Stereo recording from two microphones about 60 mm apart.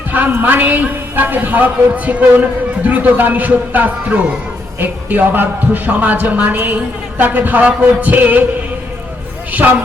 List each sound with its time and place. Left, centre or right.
0.1 s a woman's voice: right
9.5 s speech: right